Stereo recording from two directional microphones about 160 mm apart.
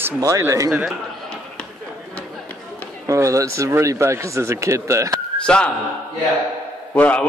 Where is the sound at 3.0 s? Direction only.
20° right (ahead or behind).